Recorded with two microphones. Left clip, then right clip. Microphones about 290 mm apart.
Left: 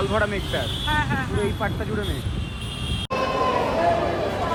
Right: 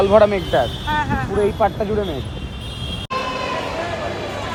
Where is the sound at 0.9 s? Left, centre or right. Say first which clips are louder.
Right 3 dB; centre.